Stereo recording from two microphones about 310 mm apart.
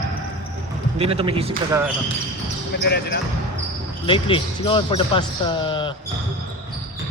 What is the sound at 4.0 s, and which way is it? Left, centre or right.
Speech, centre.